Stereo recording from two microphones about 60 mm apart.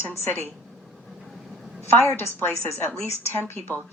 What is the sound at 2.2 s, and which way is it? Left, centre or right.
Speech, left.